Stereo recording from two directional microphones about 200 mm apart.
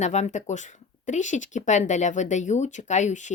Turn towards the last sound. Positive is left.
turn(degrees=35)  # may be behind; listen again after turning